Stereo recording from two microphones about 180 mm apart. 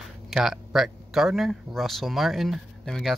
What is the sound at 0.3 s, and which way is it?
Speech, centre (ahead or behind).